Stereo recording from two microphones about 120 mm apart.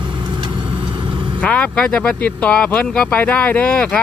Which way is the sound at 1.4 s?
10° left (ahead or behind).